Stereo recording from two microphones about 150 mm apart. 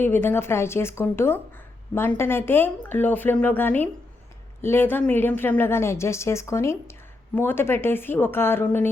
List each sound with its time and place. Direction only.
0.0 s a woman's voice: 15° left (ahead or behind)